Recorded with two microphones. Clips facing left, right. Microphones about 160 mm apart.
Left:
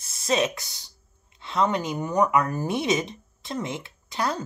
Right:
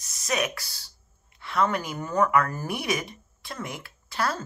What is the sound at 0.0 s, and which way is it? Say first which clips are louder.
Speech: left 4 dB; 25° left (ahead or behind).